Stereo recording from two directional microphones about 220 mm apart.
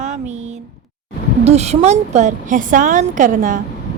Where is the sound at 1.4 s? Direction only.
30° right (ahead or behind).